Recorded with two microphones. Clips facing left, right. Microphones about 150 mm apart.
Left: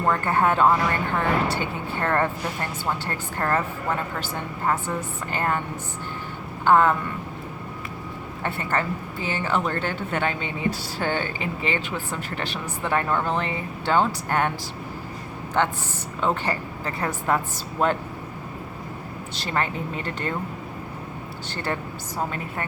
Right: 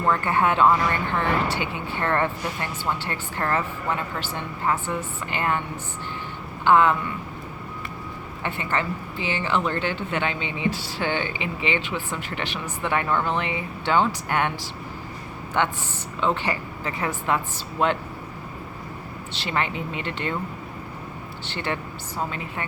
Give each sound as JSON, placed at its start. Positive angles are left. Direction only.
{"t": 0.1, "sound": "a woman's voice", "side_deg": 45}
{"t": 6.7, "sound": "a woman's voice", "side_deg": 45}
{"t": 8.4, "sound": "a woman's voice", "side_deg": 45}
{"t": 15.6, "sound": "speech", "side_deg": 40}
{"t": 19.4, "sound": "speech", "side_deg": 40}
{"t": 21.5, "sound": "speech", "side_deg": 40}